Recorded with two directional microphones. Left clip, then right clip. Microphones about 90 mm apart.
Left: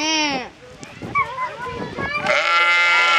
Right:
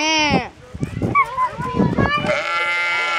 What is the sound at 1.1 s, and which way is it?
Dog, 35° right (ahead or behind).